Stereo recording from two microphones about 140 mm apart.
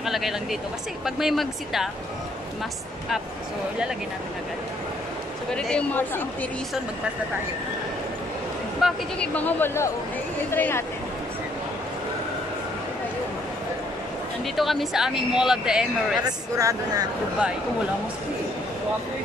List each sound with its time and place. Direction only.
0.0 s speech: centre (ahead or behind)
5.5 s speech: 5° left (ahead or behind)
8.8 s speech: 10° left (ahead or behind)
14.4 s speech: centre (ahead or behind)
16.2 s a woman's voice: 25° right (ahead or behind)